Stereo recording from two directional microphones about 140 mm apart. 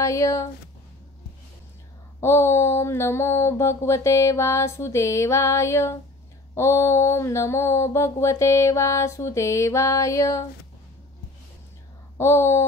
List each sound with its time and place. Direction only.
0.0 s mantra: 20° left (ahead or behind)
2.1 s mantra: 20° left (ahead or behind)
12.2 s a sound: 20° left (ahead or behind)